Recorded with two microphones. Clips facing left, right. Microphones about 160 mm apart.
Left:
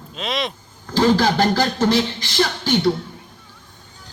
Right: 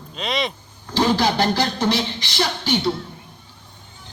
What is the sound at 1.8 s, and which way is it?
Speech, 45° left (ahead or behind).